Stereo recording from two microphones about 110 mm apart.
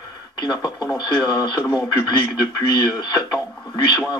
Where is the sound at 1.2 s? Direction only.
40° left (ahead or behind).